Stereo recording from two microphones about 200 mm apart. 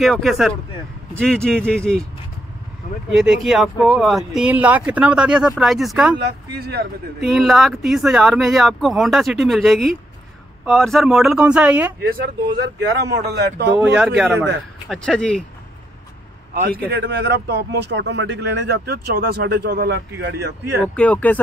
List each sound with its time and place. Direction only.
0.0 s speech: centre (ahead or behind)
3.1 s speech: centre (ahead or behind)
6.1 s speech: 55° right (ahead or behind)
7.2 s speech: centre (ahead or behind)
12.0 s speech: 50° right (ahead or behind)
13.7 s speech: 5° right (ahead or behind)
16.5 s speech: 45° right (ahead or behind)
20.8 s speech: 5° left (ahead or behind)